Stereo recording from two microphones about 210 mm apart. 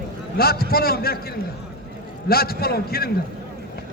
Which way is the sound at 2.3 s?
45° left (ahead or behind).